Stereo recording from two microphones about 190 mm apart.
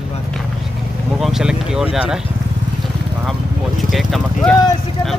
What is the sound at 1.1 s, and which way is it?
Speech, centre (ahead or behind).